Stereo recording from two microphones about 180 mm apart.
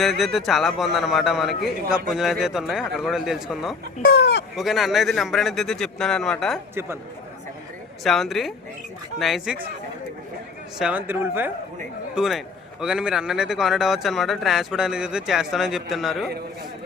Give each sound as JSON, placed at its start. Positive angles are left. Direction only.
{"t": 0.0, "sound": "a man's voice", "side_deg": 0}
{"t": 4.0, "sound": "speech", "side_deg": 65}
{"t": 4.5, "sound": "a man's voice", "side_deg": 0}
{"t": 6.7, "sound": "speech", "side_deg": -15}
{"t": 8.0, "sound": "a man's voice", "side_deg": 0}
{"t": 10.8, "sound": "a man's voice", "side_deg": -5}